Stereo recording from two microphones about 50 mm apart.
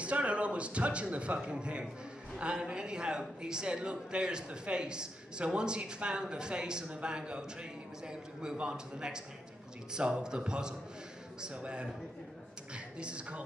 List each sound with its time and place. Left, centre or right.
0.0 s a man's voice: right